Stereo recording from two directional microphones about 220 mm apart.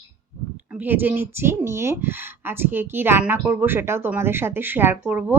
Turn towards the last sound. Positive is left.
turn(degrees=-10)  # may be behind; listen again after turning